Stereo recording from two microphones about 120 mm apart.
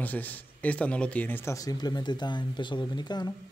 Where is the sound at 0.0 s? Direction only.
15° left (ahead or behind); by 3.3 s 35° left (ahead or behind).